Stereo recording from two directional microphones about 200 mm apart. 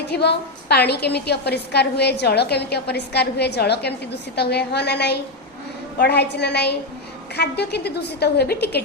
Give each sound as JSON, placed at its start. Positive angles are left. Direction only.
{"t": 0.1, "sound": "a woman's voice", "side_deg": 55}